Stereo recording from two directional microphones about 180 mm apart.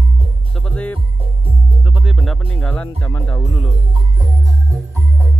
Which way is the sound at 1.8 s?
5° right (ahead or behind).